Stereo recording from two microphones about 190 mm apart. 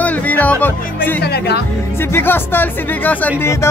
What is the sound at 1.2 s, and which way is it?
Speech, 60° left (ahead or behind).